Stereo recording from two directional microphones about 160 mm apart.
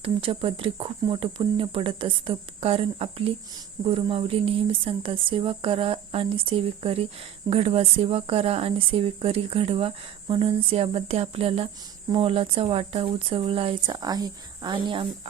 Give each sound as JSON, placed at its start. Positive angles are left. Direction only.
{"t": 0.0, "sound": "speech", "side_deg": -35}